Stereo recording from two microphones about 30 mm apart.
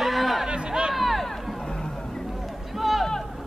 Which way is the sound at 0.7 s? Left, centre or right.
Right.